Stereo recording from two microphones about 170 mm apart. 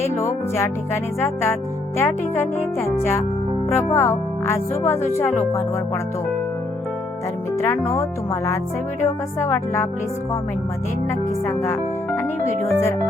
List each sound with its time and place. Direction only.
1.2 s speech: 15° left (ahead or behind)
7.6 s speech: 15° left (ahead or behind)
11.4 s speech: 15° left (ahead or behind)